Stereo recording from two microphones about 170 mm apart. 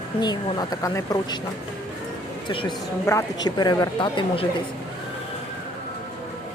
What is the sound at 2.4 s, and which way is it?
Speech, 30° left (ahead or behind).